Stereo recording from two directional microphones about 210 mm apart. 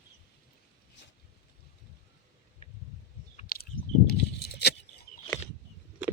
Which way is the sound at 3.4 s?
45° left (ahead or behind).